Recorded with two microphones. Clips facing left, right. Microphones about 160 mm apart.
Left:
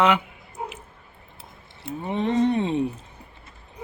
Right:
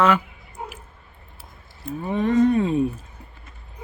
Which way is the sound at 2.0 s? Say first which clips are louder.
Right 3 dB; 25° left (ahead or behind).